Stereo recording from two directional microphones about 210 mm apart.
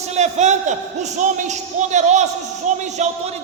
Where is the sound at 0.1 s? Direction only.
35° right (ahead or behind).